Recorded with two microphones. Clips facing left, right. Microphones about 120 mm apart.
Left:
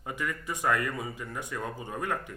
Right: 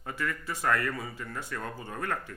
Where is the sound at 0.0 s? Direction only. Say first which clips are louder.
Even; 15° left (ahead or behind).